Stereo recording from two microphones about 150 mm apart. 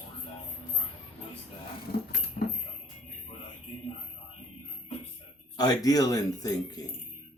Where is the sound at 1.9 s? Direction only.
80° left.